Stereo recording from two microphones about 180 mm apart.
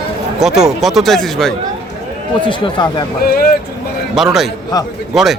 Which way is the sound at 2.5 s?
25° left (ahead or behind).